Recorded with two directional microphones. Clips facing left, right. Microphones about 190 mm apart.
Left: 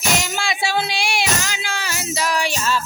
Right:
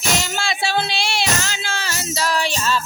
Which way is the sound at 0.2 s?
15° left (ahead or behind).